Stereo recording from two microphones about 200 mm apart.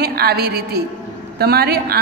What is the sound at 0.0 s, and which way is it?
A woman's voice, 50° right (ahead or behind).